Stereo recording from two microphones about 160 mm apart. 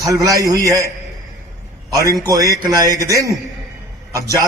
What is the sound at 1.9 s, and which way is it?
A man's voice, 20° right (ahead or behind).